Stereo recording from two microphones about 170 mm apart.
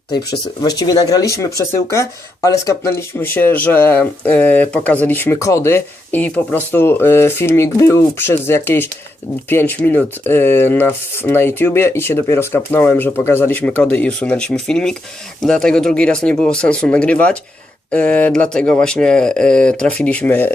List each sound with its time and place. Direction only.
0.3 s speech: 20° left (ahead or behind)